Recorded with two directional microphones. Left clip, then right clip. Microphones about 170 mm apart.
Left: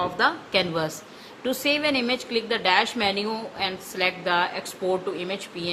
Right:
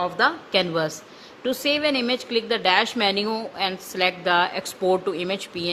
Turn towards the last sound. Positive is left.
turn(degrees=-35)  # may be behind; listen again after turning